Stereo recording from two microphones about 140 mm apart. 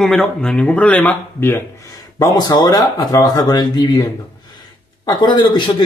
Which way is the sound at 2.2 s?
30° left (ahead or behind).